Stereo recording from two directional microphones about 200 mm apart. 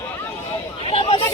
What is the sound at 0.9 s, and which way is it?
Chatter, 30° left (ahead or behind).